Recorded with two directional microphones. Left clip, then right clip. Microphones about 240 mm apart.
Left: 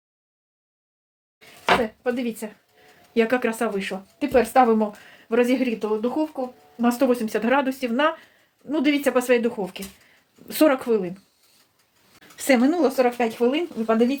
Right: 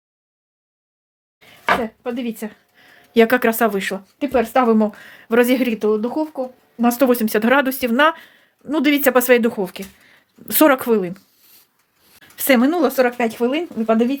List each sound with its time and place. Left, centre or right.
2.0 s speech: right
3.2 s a woman's voice: right
4.3 s a woman's voice: right
12.4 s speech: right